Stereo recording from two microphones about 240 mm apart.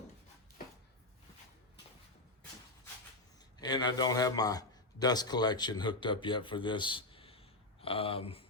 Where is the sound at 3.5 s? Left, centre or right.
Centre.